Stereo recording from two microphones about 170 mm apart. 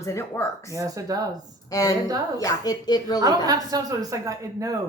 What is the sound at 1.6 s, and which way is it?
A woman's voice, 20° left (ahead or behind).